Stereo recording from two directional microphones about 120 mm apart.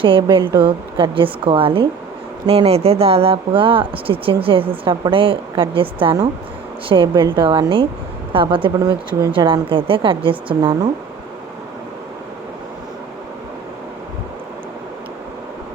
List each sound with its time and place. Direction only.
0.0 s speech: 45° right (ahead or behind)